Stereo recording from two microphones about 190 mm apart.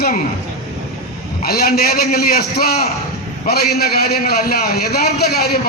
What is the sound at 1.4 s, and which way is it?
A man's voice, 55° left (ahead or behind).